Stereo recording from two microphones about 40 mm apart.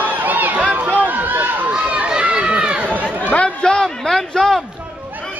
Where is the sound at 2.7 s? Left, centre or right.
Right.